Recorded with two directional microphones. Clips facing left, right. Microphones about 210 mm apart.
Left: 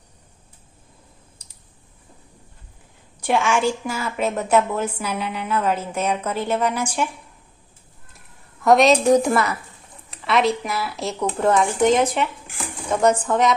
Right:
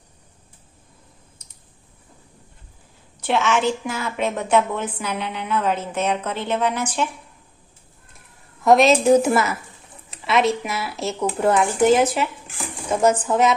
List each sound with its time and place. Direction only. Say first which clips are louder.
1.4 s clicking: even; 30° left (ahead or behind)
3.2 s a woman's voice: even; 10° left (ahead or behind)
8.2 s speech: even; centre (ahead or behind)